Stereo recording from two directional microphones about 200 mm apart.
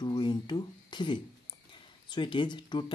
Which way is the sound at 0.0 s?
20° left (ahead or behind).